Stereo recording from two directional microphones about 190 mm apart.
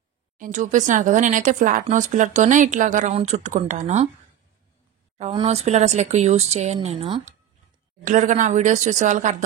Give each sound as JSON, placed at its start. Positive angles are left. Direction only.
{"t": 0.4, "sound": "speech", "side_deg": -40}
{"t": 5.1, "sound": "speech", "side_deg": -30}
{"t": 8.0, "sound": "speech", "side_deg": -40}